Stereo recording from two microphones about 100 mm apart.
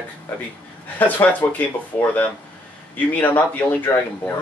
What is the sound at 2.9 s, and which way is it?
Speech, 15° left (ahead or behind).